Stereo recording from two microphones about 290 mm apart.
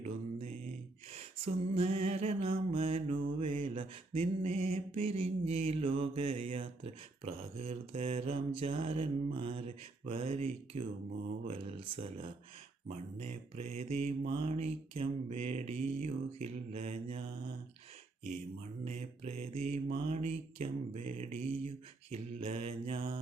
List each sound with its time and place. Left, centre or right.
0.0 s mantra: right
1.1 s a sound: right
2.2 s mantra: centre
18.9 s mantra: right